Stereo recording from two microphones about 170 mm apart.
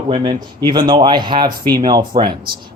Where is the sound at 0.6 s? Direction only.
25° right (ahead or behind).